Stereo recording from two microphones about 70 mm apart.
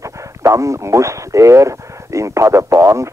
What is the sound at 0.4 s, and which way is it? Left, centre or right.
Speech, right.